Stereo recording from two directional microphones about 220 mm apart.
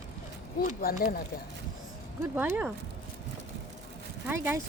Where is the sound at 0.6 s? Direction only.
40° left (ahead or behind).